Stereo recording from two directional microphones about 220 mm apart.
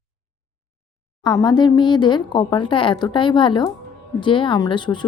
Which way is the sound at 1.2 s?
20° left (ahead or behind).